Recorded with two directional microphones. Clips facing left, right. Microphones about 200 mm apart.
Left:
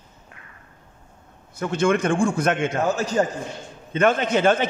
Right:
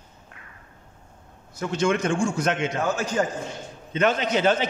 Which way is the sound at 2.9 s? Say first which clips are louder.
Left 3 dB; 35° left (ahead or behind).